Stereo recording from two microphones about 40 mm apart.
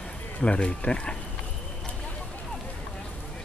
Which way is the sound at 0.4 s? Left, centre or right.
Left.